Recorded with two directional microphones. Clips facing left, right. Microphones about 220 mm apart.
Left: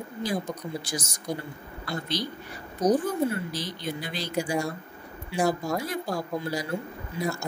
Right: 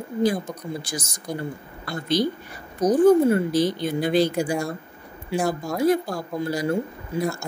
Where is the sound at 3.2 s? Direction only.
50° right (ahead or behind).